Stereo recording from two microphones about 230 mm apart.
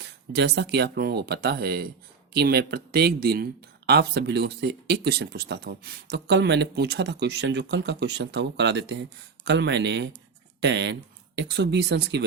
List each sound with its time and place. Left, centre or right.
0.0 s speech: right